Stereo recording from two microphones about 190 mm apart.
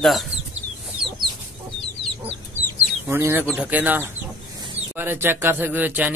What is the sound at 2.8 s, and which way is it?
Speech, 10° right (ahead or behind).